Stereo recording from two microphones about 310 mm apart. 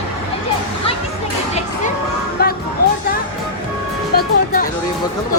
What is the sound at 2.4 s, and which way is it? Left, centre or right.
Music, left.